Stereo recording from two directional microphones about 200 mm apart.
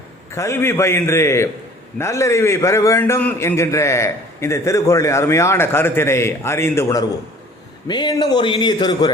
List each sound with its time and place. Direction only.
0.3 s a man's voice: 15° left (ahead or behind)